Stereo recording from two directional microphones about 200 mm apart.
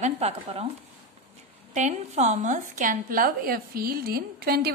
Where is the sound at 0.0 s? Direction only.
30° right (ahead or behind).